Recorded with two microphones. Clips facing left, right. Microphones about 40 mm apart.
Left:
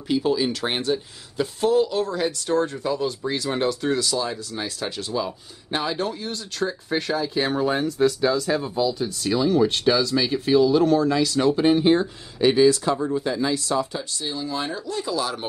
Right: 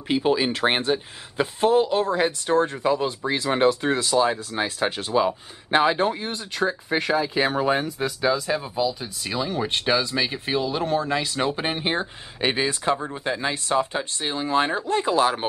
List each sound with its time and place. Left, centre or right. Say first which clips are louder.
0.1 s speech: even; right